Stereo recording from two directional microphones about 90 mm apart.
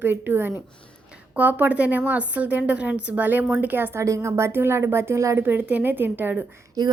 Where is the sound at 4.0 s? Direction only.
35° right (ahead or behind).